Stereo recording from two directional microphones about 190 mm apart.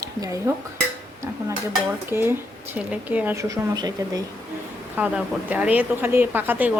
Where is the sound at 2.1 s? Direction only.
10° right (ahead or behind).